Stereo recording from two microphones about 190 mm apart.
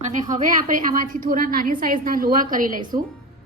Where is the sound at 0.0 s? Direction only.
40° right (ahead or behind).